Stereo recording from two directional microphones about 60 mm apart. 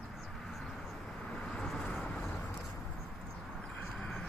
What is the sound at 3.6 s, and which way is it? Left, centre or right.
Vehicle, centre.